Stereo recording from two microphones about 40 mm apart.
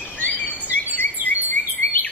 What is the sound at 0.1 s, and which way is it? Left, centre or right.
Insect, left.